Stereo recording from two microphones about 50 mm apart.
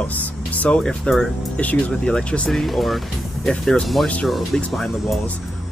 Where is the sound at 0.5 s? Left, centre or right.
Left.